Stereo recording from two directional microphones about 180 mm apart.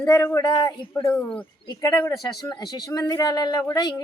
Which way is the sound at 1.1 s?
5° left (ahead or behind).